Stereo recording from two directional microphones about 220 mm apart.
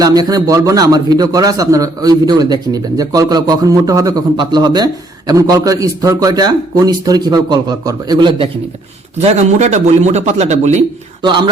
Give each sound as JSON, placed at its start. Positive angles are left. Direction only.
{"t": 0.0, "sound": "a man's voice", "side_deg": -15}
{"t": 9.2, "sound": "a man's voice", "side_deg": -30}